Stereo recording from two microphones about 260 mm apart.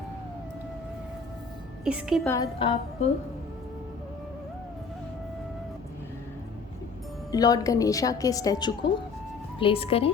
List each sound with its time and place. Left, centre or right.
1.8 s a woman's voice: centre
2.3 s a woman's voice: centre
7.3 s a woman's voice: centre